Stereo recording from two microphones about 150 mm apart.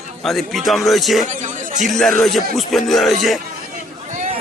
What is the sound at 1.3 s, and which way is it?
Speech, 55° right (ahead or behind).